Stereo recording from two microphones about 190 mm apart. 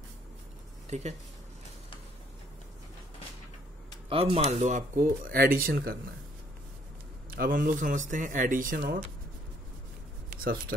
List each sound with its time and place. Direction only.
0.8 s speech: 35° right (ahead or behind)
4.1 s speech: 30° right (ahead or behind); by 5.9 s 50° right (ahead or behind)
7.2 s speech: 50° right (ahead or behind)